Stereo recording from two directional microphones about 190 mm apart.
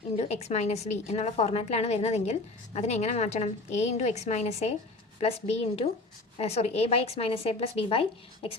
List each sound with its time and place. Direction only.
0.2 s a woman's voice: 35° left (ahead or behind)